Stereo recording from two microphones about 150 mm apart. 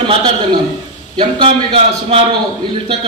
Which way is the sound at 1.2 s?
35° right (ahead or behind).